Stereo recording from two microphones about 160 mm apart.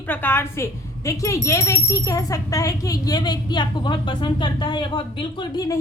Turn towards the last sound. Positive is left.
turn(degrees=25)  # may be behind; listen again after turning